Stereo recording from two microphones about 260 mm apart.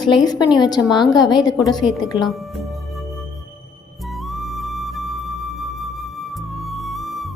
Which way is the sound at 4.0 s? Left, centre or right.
Centre.